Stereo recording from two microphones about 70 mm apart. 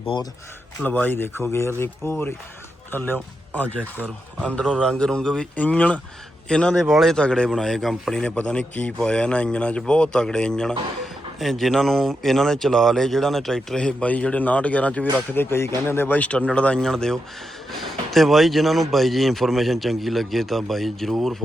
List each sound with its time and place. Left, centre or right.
0.9 s speech: left; by 5.5 s centre
5.5 s speech: left
6.7 s a man's voice: centre
8.2 s speech: centre
11.3 s speech: centre; by 15.0 s left
15.3 s speech: left
16.1 s a man's voice: left; by 21.3 s centre